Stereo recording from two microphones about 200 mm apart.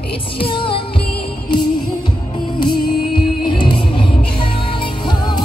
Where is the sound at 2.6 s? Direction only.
25° left (ahead or behind).